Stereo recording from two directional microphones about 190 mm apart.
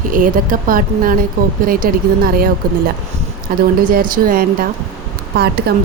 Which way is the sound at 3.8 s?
45° right (ahead or behind).